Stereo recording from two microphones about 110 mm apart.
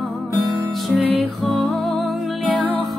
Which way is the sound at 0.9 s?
Centre (ahead or behind).